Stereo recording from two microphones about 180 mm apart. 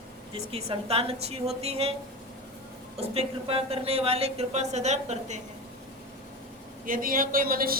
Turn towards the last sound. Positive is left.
turn(degrees=-55)  # may be behind; listen again after turning